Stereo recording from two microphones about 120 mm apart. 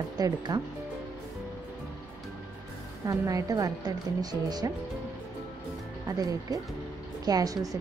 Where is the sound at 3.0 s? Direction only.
30° right (ahead or behind).